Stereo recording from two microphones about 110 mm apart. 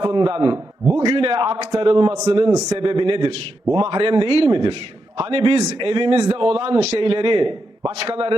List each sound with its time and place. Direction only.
0.0 s a man's voice: 45° right (ahead or behind)
0.5 s a man's voice: 20° right (ahead or behind)
1.0 s a man's voice: 50° right (ahead or behind)